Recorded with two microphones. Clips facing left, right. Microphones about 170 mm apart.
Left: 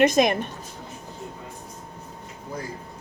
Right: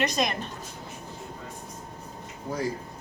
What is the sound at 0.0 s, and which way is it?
Speech, 50° left (ahead or behind).